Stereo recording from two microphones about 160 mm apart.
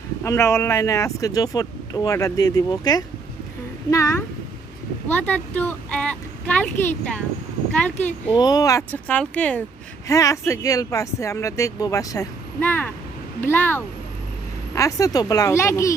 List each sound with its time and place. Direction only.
0.3 s speech: 20° left (ahead or behind)
8.4 s speech: 25° left (ahead or behind)
8.9 s speech: 10° left (ahead or behind)
10.1 s speech: 20° left (ahead or behind)